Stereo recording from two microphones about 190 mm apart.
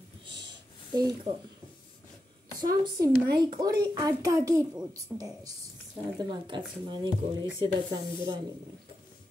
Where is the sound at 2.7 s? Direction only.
20° right (ahead or behind).